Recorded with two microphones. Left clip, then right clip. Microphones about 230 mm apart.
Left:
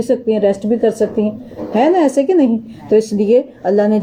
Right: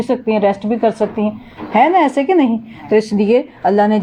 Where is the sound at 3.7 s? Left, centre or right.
Right.